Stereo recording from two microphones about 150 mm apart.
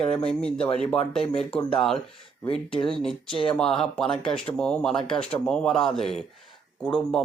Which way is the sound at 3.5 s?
5° left (ahead or behind).